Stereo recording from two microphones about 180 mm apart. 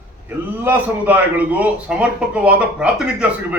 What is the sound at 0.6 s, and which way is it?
A man's voice, 10° right (ahead or behind).